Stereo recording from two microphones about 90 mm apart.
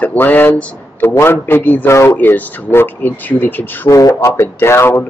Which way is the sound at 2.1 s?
20° left (ahead or behind).